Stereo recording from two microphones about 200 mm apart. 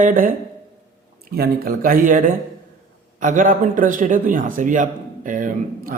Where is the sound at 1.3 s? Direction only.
50° right (ahead or behind).